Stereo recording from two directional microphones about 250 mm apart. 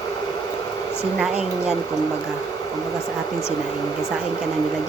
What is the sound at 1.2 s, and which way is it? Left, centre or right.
Speech, centre.